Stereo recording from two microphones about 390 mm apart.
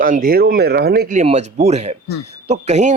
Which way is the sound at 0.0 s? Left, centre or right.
Right.